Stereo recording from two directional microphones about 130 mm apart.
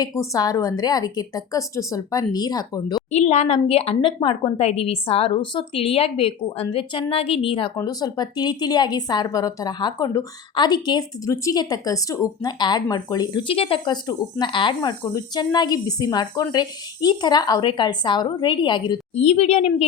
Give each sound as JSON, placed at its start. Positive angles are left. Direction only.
{"t": 0.0, "sound": "a woman's voice", "side_deg": 25}
{"t": 3.1, "sound": "a woman's voice", "side_deg": 60}
{"t": 7.8, "sound": "a woman's voice", "side_deg": 30}
{"t": 13.5, "sound": "a woman's voice", "side_deg": 45}
{"t": 19.1, "sound": "a woman's voice", "side_deg": 55}